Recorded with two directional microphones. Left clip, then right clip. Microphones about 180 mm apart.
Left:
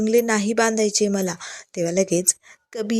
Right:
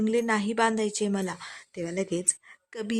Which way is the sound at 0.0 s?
15° left (ahead or behind).